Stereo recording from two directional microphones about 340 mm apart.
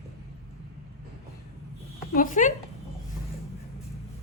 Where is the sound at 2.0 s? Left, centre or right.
Left.